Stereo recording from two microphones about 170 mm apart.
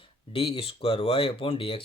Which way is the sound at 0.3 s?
35° left (ahead or behind).